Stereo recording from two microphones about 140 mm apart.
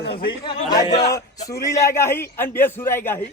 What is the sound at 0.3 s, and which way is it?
A man's voice, 30° left (ahead or behind).